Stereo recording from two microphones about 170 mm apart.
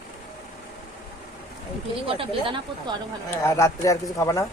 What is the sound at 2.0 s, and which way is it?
Speech, 30° right (ahead or behind).